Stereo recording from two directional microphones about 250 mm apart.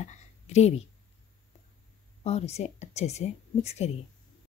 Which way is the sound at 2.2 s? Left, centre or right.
Left.